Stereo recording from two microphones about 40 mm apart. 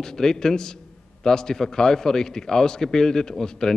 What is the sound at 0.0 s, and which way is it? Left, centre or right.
A man's voice, centre.